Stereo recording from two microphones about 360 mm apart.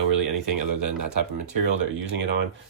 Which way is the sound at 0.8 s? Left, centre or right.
Right.